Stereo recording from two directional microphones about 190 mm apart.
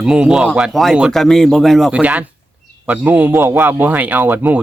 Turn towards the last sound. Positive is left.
turn(degrees=-10)  # may be behind; listen again after turning